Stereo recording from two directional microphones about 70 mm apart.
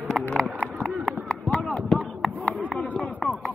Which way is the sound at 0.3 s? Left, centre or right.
Centre.